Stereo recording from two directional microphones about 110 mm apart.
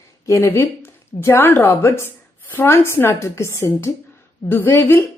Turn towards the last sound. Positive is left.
turn(degrees=20)  # may be behind; listen again after turning